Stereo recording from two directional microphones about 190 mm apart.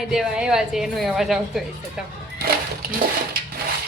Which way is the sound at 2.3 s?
55° right (ahead or behind).